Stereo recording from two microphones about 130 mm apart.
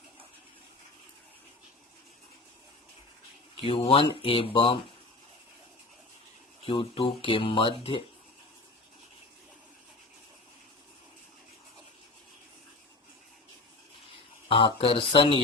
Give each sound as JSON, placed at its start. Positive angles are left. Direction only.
{"t": 3.6, "sound": "speech", "side_deg": 45}
{"t": 6.7, "sound": "speech", "side_deg": 40}
{"t": 14.4, "sound": "speech", "side_deg": 45}